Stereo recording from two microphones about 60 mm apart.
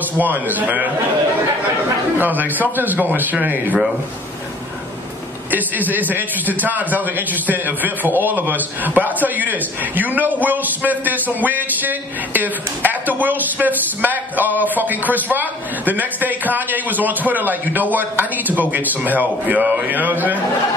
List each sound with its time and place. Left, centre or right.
0.2 s a man's voice: right
2.1 s a man's voice: right
5.5 s a man's voice: right